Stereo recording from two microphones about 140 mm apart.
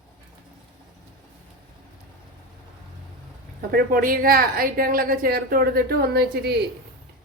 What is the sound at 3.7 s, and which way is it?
A woman's voice, 90° right.